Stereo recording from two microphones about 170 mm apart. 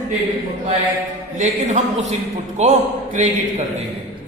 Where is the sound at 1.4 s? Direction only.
45° right (ahead or behind).